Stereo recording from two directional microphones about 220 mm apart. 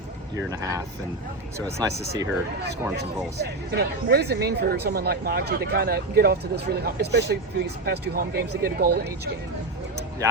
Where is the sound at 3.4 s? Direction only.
45° right (ahead or behind).